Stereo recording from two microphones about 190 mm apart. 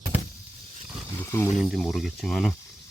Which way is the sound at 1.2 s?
15° left (ahead or behind).